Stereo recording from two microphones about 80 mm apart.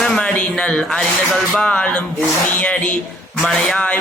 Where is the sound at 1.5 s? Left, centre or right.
Centre.